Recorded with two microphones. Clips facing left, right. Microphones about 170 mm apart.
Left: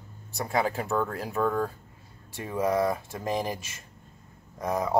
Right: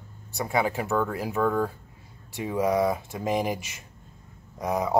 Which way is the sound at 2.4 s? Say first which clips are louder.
Right 2 dB; 10° right (ahead or behind).